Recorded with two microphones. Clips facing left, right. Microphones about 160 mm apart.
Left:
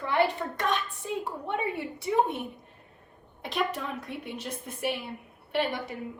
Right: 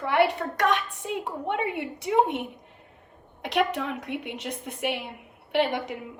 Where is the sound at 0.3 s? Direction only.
75° right (ahead or behind).